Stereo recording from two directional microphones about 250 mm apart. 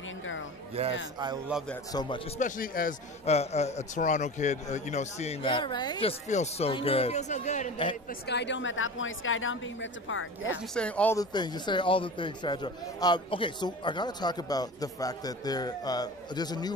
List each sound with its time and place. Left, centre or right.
0.8 s a man's voice: right
1.5 s a man's voice: centre
1.9 s a man's voice: centre
7.9 s a woman's voice: left
10.7 s a man's voice: centre